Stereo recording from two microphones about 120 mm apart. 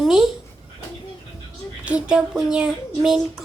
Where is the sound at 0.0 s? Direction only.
5° right (ahead or behind).